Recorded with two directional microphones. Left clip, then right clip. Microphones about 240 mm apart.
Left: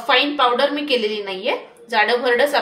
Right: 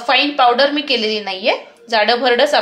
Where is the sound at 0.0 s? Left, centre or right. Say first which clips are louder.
Right 3 dB; right.